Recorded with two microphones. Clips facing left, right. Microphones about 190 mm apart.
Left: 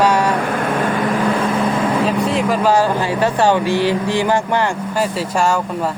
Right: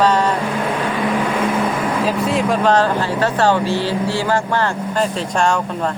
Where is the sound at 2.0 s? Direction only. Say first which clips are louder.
Left 1 dB; centre (ahead or behind).